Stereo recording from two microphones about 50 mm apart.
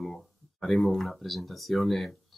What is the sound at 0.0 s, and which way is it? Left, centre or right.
Speech, centre.